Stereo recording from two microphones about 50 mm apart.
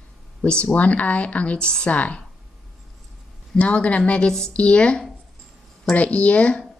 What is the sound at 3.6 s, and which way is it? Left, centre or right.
Speech, left.